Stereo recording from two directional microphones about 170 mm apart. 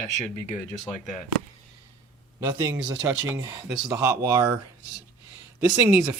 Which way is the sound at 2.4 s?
20° right (ahead or behind).